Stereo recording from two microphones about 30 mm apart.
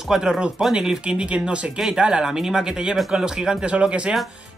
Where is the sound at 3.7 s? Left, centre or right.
Right.